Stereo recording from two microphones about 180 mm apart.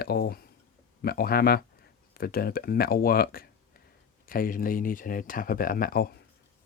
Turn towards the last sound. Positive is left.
turn(degrees=55)  # may be behind; listen again after turning